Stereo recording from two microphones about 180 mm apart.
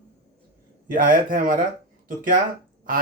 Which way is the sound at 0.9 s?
50° right (ahead or behind).